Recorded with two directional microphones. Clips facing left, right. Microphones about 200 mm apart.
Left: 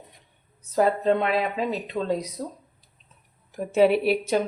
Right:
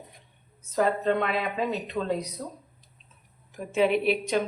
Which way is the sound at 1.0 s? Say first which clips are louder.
Left 3 dB; 30° left (ahead or behind).